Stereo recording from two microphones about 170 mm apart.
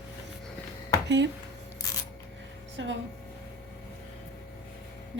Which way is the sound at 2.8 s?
90° right.